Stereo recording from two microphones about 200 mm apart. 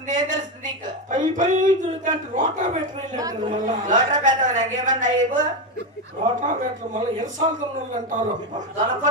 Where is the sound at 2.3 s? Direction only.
40° right (ahead or behind).